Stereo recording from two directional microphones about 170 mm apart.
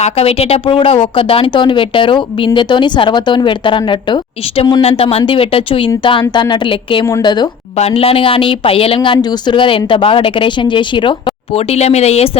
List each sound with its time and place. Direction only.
0.0 s speech: 35° left (ahead or behind)
11.5 s speech: 40° left (ahead or behind)